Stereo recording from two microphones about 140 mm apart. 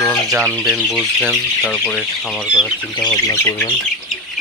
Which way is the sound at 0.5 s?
5° right (ahead or behind).